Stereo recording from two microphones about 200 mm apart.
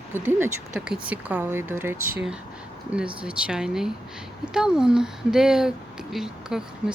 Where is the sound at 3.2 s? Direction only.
5° right (ahead or behind).